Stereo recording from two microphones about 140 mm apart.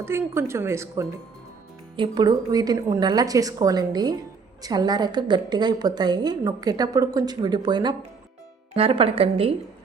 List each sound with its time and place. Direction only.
0.0 s a woman's voice: 20° right (ahead or behind)
2.0 s a woman's voice: 30° right (ahead or behind)
8.7 s a woman's voice: 40° right (ahead or behind)